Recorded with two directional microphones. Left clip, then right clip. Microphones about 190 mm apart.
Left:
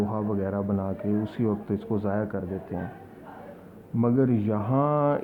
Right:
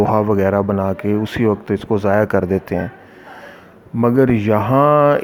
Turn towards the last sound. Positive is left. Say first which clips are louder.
# right 12 dB
turn(degrees=-35)  # may be behind; listen again after turning